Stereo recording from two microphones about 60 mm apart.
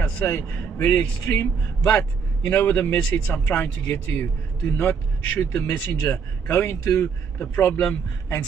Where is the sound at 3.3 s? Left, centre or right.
Left.